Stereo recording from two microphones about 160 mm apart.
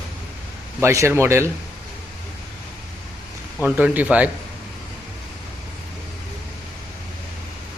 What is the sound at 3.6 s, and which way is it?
Speech, 10° right (ahead or behind).